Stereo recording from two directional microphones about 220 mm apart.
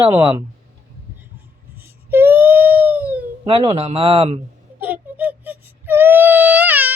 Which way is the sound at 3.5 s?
25° right (ahead or behind).